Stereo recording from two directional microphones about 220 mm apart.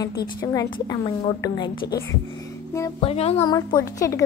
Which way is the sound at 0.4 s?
15° left (ahead or behind).